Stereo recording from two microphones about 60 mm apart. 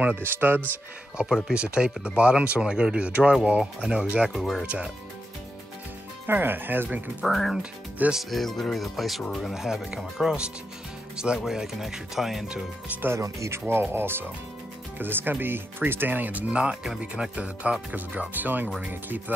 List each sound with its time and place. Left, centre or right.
0.1 s speech: right
1.2 s music: centre
1.5 s speech: centre
3.1 s music: right
3.4 s speech: centre
4.3 s speech: centre
6.2 s speech: right
7.2 s speech: centre
11.3 s speech: centre
13.2 s speech: right; by 16.7 s centre
17.0 s music: centre
18.9 s speech: right